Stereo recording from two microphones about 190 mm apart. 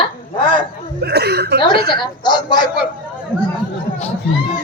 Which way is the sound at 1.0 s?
60° right (ahead or behind).